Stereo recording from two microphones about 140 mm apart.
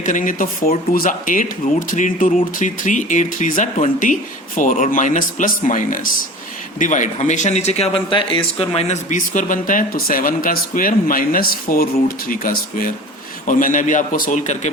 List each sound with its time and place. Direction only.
0.0 s speech: 70° left (ahead or behind)
2.6 s speech: 65° left (ahead or behind); by 12.9 s 85° left
13.5 s speech: 70° left (ahead or behind)